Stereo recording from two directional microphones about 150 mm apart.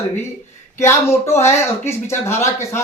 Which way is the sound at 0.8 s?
20° left (ahead or behind).